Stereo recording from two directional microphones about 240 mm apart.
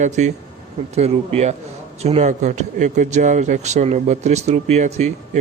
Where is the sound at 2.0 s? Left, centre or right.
Right.